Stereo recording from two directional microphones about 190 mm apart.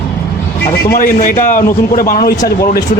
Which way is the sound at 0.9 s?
45° left (ahead or behind).